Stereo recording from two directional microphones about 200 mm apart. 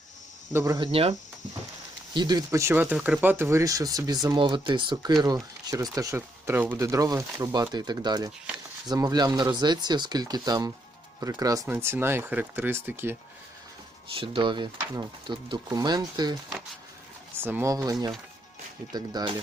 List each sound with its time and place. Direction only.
0.5 s speech: 15° right (ahead or behind)
0.9 s speech: 30° right (ahead or behind)
2.1 s speech: 20° right (ahead or behind)
14.2 s speech: 25° right (ahead or behind)
18.9 s speech: 20° right (ahead or behind)